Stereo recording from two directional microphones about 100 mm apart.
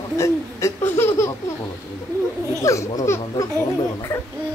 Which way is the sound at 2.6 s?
30° left (ahead or behind).